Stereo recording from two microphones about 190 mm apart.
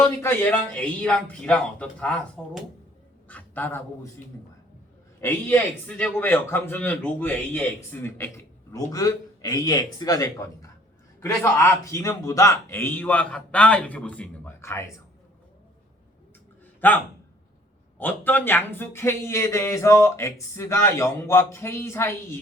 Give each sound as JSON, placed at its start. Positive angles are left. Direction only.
{"t": 0.0, "sound": "a man's voice", "side_deg": 15}
{"t": 5.2, "sound": "a man's voice", "side_deg": 10}
{"t": 16.8, "sound": "a man's voice", "side_deg": 10}
{"t": 18.0, "sound": "a man's voice", "side_deg": 10}